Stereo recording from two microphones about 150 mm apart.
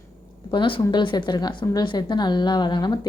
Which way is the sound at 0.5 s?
30° left (ahead or behind).